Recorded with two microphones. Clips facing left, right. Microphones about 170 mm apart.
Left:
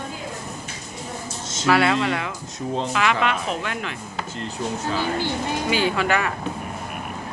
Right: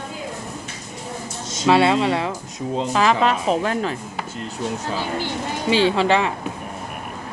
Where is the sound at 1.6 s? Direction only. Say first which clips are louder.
Right 3 dB; 25° right (ahead or behind).